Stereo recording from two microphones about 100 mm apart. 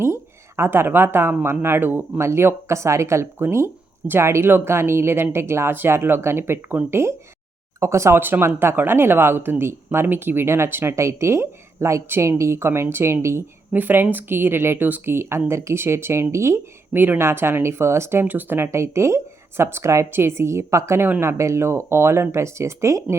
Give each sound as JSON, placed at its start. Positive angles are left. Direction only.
{"t": 0.0, "sound": "speech", "side_deg": -25}